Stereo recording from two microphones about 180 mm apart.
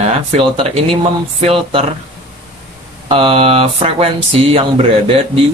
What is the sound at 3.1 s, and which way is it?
Speech, 30° right (ahead or behind).